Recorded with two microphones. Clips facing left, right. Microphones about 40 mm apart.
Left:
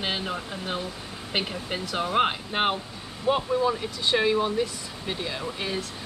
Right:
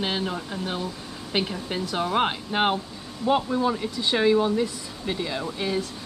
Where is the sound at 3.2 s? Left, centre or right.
Left.